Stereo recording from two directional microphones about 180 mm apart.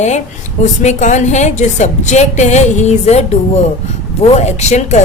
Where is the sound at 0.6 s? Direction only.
40° left (ahead or behind).